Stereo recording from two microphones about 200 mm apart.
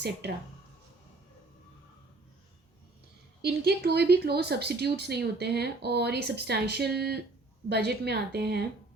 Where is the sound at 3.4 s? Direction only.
55° right (ahead or behind).